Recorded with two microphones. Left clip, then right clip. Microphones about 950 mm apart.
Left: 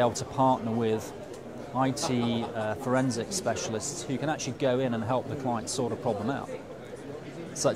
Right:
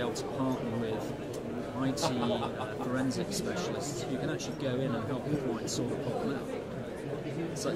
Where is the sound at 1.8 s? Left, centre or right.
Left.